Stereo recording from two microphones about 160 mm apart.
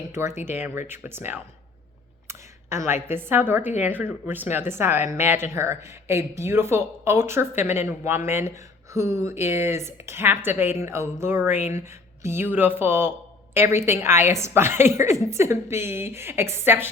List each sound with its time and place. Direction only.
0.1 s speech: 15° right (ahead or behind)